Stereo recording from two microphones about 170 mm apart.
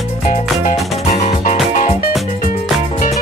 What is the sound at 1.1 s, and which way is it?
Music, 45° left (ahead or behind).